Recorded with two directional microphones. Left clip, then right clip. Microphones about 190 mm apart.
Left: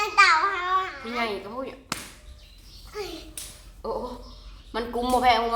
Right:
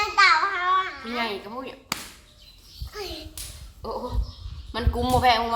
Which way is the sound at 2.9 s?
Centre (ahead or behind).